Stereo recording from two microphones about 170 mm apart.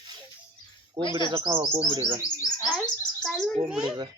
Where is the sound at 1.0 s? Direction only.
25° right (ahead or behind).